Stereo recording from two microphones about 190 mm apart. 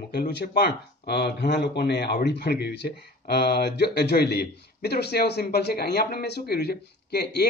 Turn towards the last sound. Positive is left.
turn(degrees=60)  # may be behind; listen again after turning